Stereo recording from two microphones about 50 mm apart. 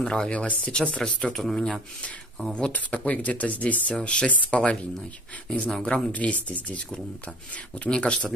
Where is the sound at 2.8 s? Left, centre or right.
Left.